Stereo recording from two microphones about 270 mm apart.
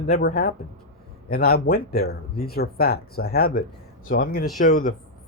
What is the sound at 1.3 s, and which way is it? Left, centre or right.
Speech, left.